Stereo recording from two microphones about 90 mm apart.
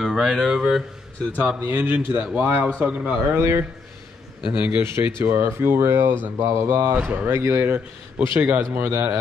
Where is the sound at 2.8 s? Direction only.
10° right (ahead or behind).